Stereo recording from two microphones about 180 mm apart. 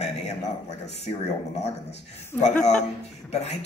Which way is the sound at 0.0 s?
40° left (ahead or behind).